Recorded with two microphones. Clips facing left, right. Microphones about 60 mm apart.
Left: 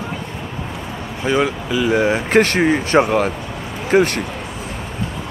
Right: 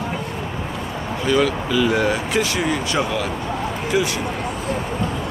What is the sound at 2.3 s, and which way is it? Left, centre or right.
Speech, left.